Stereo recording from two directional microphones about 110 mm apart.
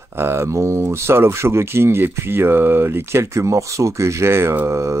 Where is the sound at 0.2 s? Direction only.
20° right (ahead or behind).